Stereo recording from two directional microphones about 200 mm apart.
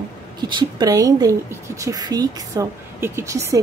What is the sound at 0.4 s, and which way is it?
Speech, 20° right (ahead or behind).